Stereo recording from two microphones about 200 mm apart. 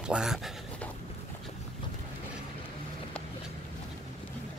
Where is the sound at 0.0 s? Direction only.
5° right (ahead or behind).